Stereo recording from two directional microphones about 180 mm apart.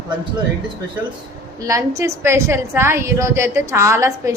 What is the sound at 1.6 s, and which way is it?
A woman's voice, 15° right (ahead or behind).